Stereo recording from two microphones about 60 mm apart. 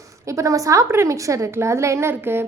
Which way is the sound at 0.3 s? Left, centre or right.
Right.